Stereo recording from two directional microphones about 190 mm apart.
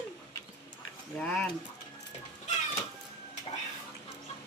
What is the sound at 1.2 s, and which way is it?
Speech, 5° left (ahead or behind).